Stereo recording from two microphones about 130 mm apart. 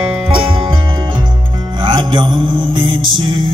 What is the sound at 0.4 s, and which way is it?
Music, 40° right (ahead or behind).